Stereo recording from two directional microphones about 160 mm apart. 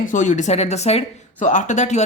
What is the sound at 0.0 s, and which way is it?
Speech, 50° left (ahead or behind).